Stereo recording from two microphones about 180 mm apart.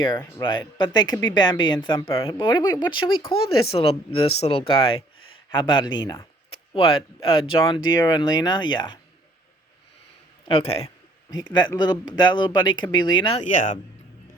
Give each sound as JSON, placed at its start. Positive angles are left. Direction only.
{"t": 0.2, "sound": "speech", "side_deg": 10}
{"t": 0.4, "sound": "speech", "side_deg": 25}
{"t": 10.5, "sound": "a man's voice", "side_deg": 35}
{"t": 11.5, "sound": "speech", "side_deg": 25}
{"t": 13.4, "sound": "speech", "side_deg": 45}